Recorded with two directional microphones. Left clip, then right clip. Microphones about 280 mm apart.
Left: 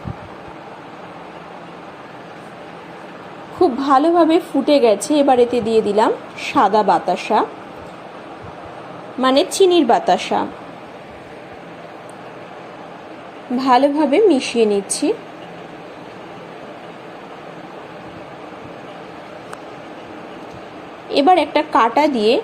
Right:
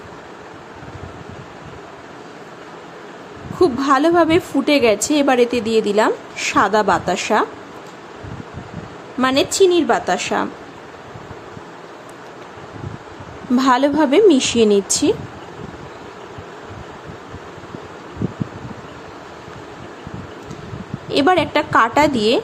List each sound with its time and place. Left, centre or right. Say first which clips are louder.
3.6 s a woman's voice: left 1 dB; centre
9.2 s a woman's voice: left 1 dB; centre
13.6 s a woman's voice: left 1 dB; centre
21.1 s a woman's voice: left 2 dB; centre